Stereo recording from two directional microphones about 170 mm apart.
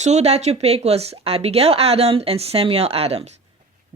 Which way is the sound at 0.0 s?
40° right (ahead or behind).